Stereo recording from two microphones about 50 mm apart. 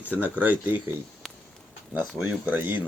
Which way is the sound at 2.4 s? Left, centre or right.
Right.